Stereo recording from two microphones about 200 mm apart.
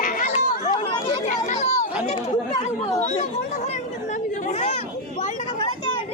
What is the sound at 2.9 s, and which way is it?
Speech, 35° left (ahead or behind).